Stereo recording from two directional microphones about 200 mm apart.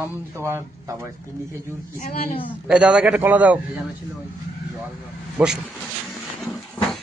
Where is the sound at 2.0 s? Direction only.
40° left (ahead or behind).